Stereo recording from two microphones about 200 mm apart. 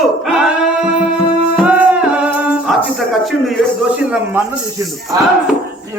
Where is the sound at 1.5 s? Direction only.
5° right (ahead or behind).